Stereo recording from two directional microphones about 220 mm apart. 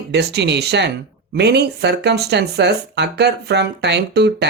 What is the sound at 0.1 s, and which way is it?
Speech, 50° right (ahead or behind).